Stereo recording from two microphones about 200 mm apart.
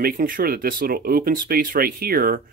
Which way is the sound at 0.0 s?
45° right (ahead or behind).